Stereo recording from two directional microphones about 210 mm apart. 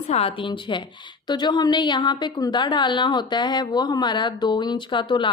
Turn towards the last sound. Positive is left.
turn(degrees=20)  # may be behind; listen again after turning